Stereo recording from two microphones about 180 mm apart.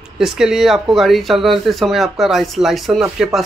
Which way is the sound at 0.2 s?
5° right (ahead or behind).